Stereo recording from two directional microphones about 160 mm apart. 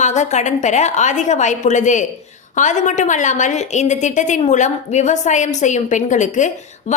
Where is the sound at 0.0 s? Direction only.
45° left (ahead or behind).